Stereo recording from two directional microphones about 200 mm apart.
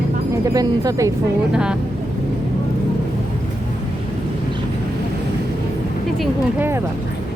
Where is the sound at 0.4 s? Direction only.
20° right (ahead or behind).